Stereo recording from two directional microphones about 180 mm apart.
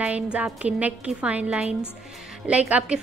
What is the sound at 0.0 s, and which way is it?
A woman's voice, 5° right (ahead or behind).